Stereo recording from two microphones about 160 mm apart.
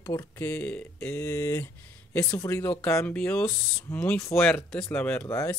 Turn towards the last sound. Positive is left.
turn(degrees=15)  # may be behind; listen again after turning